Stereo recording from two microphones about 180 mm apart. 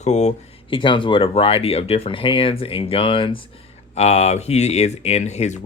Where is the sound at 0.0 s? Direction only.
40° left (ahead or behind).